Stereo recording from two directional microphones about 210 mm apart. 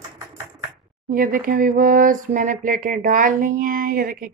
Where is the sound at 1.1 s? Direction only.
40° right (ahead or behind).